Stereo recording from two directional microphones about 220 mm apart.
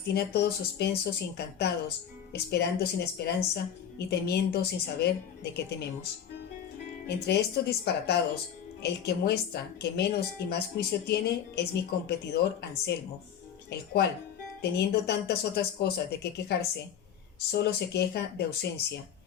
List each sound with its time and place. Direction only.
0.0 s a woman's voice: 50° left (ahead or behind)
7.3 s a woman's voice: 50° left (ahead or behind)